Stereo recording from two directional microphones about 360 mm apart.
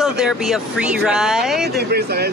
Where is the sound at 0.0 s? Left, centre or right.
Centre.